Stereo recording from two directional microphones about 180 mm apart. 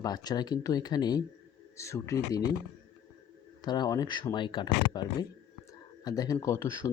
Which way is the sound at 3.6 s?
25° left (ahead or behind).